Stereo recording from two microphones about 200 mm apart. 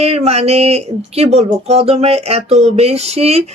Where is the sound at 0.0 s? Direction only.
30° right (ahead or behind).